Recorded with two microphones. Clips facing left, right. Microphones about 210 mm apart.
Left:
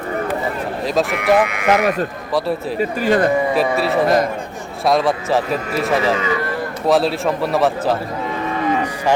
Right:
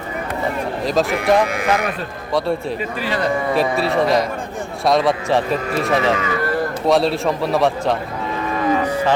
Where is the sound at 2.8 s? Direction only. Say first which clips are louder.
Left 6 dB; 45° left (ahead or behind).